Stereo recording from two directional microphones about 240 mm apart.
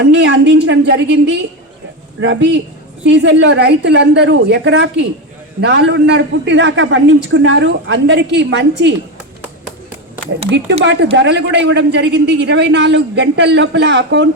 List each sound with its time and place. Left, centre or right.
0.0 s a man's voice: right
10.8 s a man's voice: right